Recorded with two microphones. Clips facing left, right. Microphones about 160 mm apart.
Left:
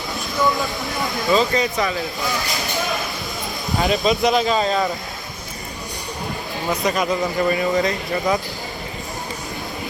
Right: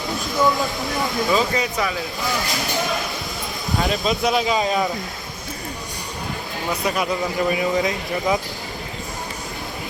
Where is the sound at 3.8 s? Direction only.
Centre (ahead or behind).